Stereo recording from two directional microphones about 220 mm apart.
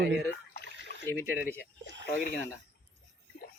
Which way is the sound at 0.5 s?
50° left (ahead or behind).